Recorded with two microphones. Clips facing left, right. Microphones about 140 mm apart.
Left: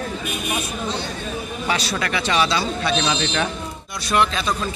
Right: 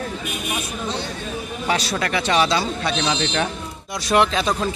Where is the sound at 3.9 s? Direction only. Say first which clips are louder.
Right 2 dB; 90° right.